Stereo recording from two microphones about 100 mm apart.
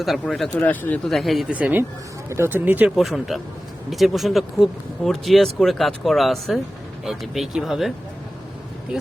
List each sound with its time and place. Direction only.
0.0 s speech: centre (ahead or behind)
0.6 s speech: 20° left (ahead or behind)
1.0 s speech: centre (ahead or behind)
1.5 s speech: 15° right (ahead or behind)
2.9 s speech: centre (ahead or behind)